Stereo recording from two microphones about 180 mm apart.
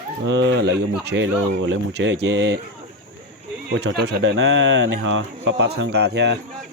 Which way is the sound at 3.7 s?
80° right.